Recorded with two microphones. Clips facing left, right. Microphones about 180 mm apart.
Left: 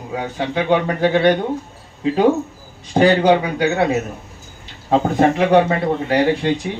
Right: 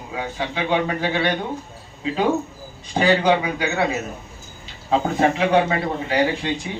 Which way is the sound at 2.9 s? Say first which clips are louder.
Left 4 dB; 45° left (ahead or behind).